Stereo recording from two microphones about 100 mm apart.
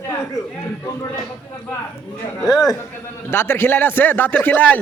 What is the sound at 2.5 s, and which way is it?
Speech, 40° left (ahead or behind).